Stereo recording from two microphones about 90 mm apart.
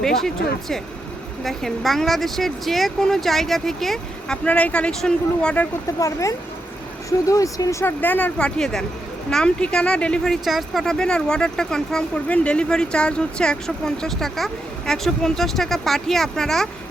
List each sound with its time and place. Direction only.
0.0 s speech: 5° left (ahead or behind)
1.5 s speech: centre (ahead or behind)
4.4 s speech: 15° left (ahead or behind)
6.0 s speech: 35° left (ahead or behind)
8.0 s speech: 20° left (ahead or behind)
10.4 s speech: centre (ahead or behind)